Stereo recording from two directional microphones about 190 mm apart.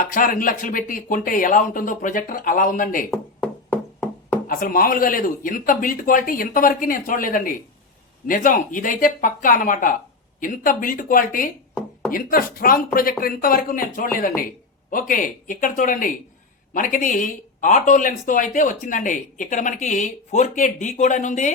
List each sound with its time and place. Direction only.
0.0 s speech: 45° left (ahead or behind)
3.1 s a sound: 5° left (ahead or behind)
4.4 s speech: 45° left (ahead or behind)